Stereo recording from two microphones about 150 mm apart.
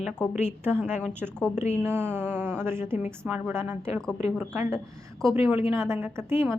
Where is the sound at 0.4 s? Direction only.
15° right (ahead or behind).